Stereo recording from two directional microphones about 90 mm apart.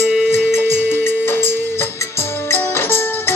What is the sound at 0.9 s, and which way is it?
Music, 25° left (ahead or behind).